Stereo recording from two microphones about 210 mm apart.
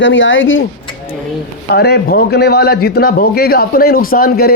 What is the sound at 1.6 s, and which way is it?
A man's voice, 50° left (ahead or behind).